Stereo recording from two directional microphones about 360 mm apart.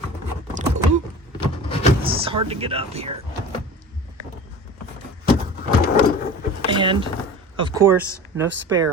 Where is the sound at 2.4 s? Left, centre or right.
Centre.